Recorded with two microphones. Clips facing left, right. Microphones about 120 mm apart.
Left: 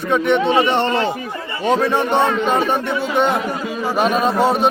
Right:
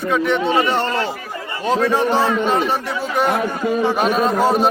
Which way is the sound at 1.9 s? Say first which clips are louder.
Even; 5° right (ahead or behind).